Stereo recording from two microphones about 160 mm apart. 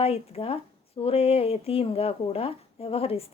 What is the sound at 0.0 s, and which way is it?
A woman's voice, 40° left (ahead or behind).